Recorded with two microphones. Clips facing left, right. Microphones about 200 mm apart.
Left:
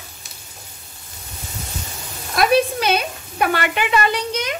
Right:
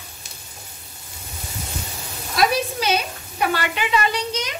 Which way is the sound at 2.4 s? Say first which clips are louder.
Left 4 dB; 55° left (ahead or behind).